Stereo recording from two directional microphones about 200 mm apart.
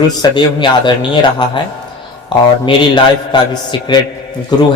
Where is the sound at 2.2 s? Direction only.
20° left (ahead or behind).